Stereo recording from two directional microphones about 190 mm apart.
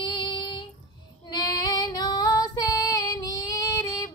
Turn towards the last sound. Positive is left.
turn(degrees=20)  # may be behind; listen again after turning